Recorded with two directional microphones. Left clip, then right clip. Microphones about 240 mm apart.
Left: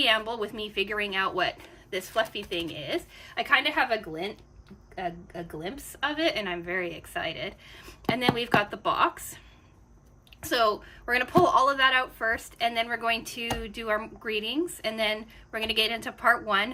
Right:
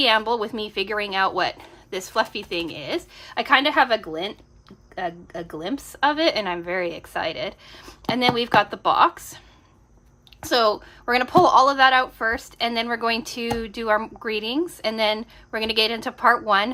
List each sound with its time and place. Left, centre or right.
0.0 s a woman's voice: centre
10.4 s a woman's voice: centre